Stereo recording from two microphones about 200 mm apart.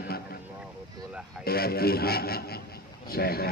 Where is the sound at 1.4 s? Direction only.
50° left (ahead or behind).